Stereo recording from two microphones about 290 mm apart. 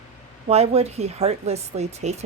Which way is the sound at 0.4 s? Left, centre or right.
Right.